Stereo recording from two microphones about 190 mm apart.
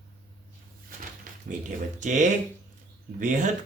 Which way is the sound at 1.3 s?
45° right (ahead or behind).